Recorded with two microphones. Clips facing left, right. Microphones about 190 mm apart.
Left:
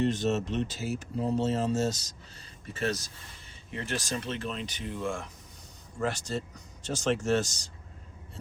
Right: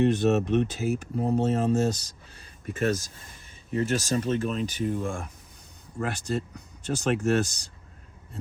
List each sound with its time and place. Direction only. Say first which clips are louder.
0.0 s speech: right 5 dB; 60° right (ahead or behind)